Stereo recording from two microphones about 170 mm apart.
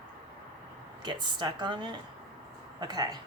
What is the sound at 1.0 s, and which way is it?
Speech, 25° right (ahead or behind).